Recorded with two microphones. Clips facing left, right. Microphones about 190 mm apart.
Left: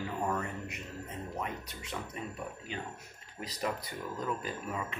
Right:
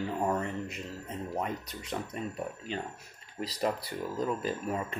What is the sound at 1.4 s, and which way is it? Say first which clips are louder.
Speech: right 4 dB; 40° right (ahead or behind).